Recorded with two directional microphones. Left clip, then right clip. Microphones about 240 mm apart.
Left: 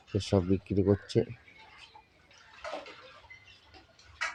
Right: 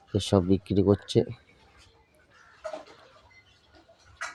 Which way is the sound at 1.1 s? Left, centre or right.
Right.